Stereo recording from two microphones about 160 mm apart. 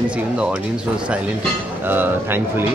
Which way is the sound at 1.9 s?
15° right (ahead or behind).